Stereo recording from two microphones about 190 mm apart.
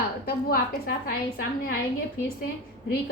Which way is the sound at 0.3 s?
50° left (ahead or behind).